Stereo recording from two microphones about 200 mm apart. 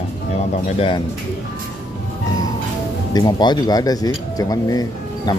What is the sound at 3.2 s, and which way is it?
Speech, 20° left (ahead or behind).